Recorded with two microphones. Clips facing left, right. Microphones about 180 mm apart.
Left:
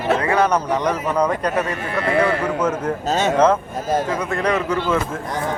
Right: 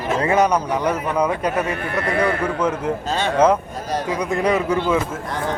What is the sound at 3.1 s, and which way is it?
Speech, 45° left (ahead or behind).